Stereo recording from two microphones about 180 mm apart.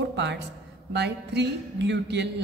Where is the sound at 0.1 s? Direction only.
75° right (ahead or behind).